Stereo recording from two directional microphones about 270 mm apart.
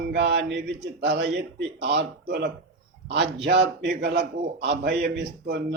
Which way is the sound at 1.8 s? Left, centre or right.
Right.